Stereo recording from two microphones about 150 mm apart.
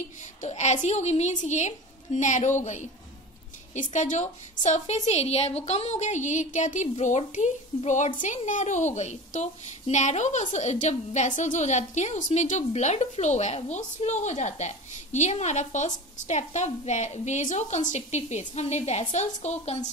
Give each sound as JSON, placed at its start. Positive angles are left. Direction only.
{"t": 0.4, "sound": "a child's voice", "side_deg": 50}